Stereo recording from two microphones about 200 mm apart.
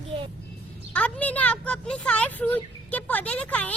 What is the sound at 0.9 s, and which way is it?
Speech, 5° left (ahead or behind).